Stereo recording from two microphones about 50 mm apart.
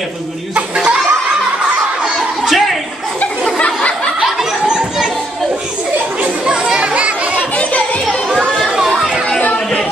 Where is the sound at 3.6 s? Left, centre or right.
Left.